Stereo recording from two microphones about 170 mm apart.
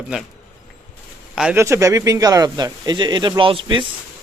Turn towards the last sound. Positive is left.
turn(degrees=-30)  # may be behind; listen again after turning